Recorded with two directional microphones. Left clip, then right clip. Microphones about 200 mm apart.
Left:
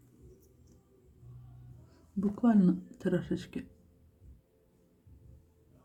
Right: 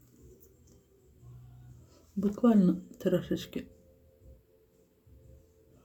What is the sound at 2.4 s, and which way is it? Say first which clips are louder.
Speech: right 2 dB; 20° left (ahead or behind).